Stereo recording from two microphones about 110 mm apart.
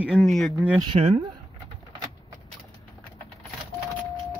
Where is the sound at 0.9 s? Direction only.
65° right (ahead or behind).